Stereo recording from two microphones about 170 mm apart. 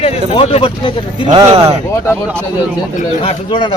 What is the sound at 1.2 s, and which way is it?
Speech, 30° right (ahead or behind).